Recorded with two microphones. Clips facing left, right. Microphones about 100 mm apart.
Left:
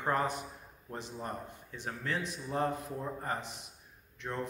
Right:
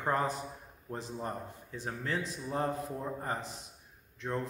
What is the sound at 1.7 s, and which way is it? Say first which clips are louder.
Speech: right 1 dB; 30° right (ahead or behind).